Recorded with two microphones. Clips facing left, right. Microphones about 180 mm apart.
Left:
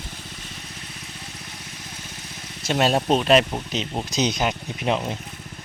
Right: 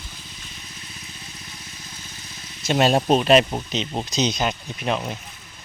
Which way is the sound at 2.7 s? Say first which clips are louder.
Right 2 dB; centre (ahead or behind).